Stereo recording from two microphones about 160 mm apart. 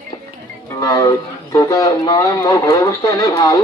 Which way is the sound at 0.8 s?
20° left (ahead or behind).